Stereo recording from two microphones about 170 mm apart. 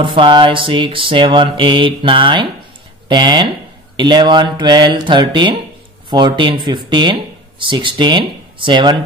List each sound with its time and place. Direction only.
0.0 s mantra: 30° right (ahead or behind)
6.0 s speech: 25° right (ahead or behind)